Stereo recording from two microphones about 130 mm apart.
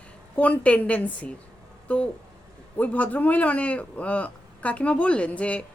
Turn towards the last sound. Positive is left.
turn(degrees=10)  # may be behind; listen again after turning